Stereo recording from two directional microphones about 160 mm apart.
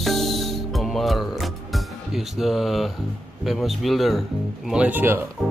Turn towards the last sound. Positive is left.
turn(degrees=-10)  # may be behind; listen again after turning